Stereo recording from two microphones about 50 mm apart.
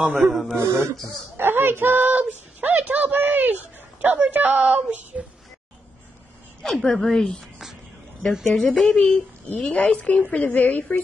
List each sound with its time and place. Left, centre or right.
0.0 s speech: right
0.3 s a woman's voice: centre
0.6 s a sound: right
1.3 s a sound: right
4.0 s speech: right
6.6 s speech: centre
8.3 s a woman's voice: centre
8.7 s a woman's voice: centre; by 11.0 s left